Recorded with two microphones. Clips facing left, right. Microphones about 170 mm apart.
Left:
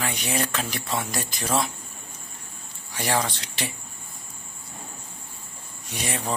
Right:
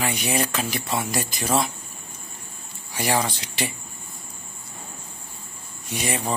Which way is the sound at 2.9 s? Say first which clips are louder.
Right 2 dB; 5° right (ahead or behind).